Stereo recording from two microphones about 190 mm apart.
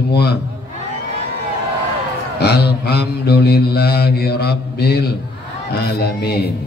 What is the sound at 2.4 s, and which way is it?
Mantra, 60° left (ahead or behind).